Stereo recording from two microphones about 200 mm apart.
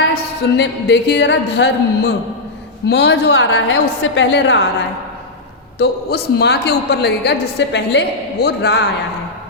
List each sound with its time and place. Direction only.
0.1 s a woman's voice: 60° left (ahead or behind)
5.8 s a woman's voice: 55° left (ahead or behind)